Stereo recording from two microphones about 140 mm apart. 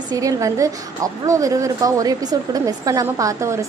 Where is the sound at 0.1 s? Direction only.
25° right (ahead or behind).